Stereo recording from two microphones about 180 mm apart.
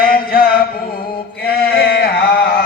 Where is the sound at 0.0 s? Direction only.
55° left (ahead or behind).